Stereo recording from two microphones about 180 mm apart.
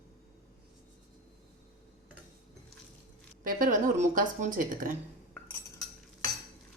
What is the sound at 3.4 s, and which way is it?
A woman's voice, 50° right (ahead or behind).